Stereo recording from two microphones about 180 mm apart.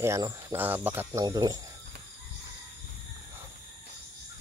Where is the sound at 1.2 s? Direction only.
20° right (ahead or behind).